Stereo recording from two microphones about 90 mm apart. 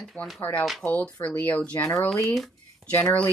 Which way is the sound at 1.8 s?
30° left (ahead or behind).